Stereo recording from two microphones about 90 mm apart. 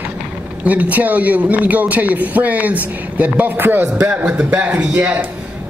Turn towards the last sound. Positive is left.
turn(degrees=-15)  # may be behind; listen again after turning